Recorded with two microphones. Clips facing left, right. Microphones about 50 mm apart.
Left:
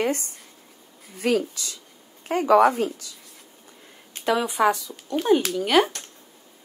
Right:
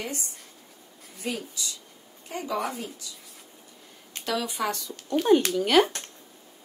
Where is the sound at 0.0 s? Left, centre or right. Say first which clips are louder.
Left 10 dB; left.